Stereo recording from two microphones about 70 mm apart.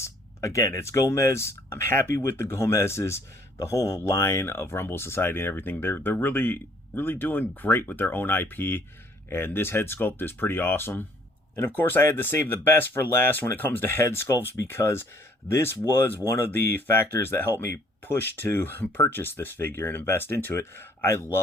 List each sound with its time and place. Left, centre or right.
0.0 s speech: left
14.0 s speech: left